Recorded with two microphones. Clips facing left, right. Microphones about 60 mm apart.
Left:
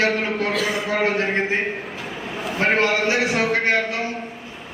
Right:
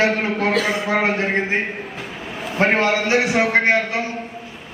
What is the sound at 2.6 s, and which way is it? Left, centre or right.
A man's voice, right.